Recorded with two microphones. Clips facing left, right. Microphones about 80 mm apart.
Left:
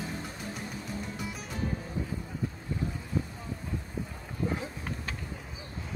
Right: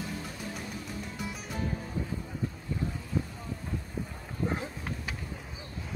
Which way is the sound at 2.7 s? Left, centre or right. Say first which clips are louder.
Even; left.